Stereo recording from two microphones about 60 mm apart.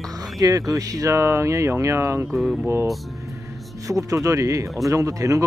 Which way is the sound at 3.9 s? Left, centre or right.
Right.